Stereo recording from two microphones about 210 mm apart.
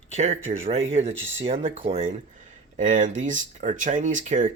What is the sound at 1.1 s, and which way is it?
Speech, 65° right (ahead or behind).